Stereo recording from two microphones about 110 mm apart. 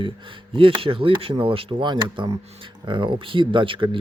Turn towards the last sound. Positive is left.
turn(degrees=-50)  # may be behind; listen again after turning